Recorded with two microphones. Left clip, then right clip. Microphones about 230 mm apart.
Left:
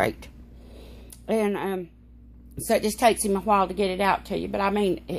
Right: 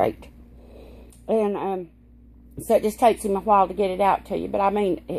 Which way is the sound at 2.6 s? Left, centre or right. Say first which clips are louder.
Right 3 dB; left.